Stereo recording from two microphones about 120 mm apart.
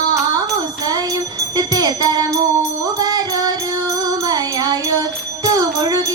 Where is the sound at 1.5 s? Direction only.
35° right (ahead or behind).